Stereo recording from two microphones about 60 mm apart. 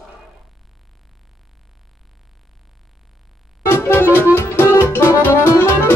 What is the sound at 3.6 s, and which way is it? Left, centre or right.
Music, left.